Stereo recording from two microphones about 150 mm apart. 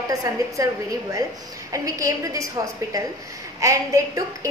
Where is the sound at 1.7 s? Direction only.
20° right (ahead or behind).